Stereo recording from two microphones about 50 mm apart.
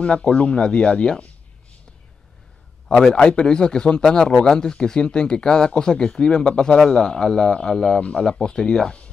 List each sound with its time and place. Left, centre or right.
0.0 s speech: left
3.0 s speech: centre